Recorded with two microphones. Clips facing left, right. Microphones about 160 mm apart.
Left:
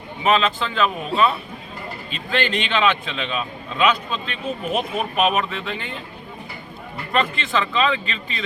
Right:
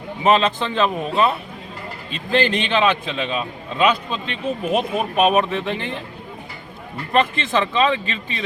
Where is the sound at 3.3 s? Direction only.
25° right (ahead or behind).